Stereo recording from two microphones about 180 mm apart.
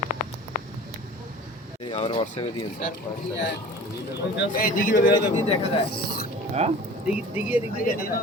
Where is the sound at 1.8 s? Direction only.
30° left (ahead or behind).